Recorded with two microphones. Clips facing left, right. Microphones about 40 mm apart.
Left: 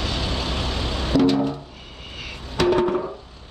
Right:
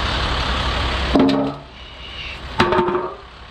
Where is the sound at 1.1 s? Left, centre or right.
Right.